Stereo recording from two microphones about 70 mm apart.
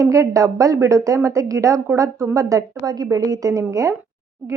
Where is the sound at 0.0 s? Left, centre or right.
Right.